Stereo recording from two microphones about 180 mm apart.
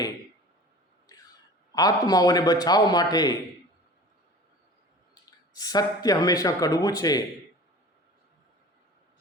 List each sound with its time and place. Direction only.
1.7 s a man's voice: 20° left (ahead or behind)
5.1 s speech: 20° left (ahead or behind)